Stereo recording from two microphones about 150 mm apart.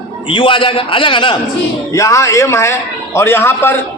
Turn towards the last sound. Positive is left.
turn(degrees=15)  # may be behind; listen again after turning